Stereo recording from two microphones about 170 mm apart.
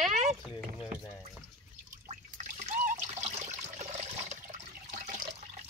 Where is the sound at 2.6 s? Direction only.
40° right (ahead or behind).